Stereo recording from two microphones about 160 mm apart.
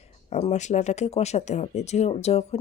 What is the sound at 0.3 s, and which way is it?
Speech, 45° left (ahead or behind).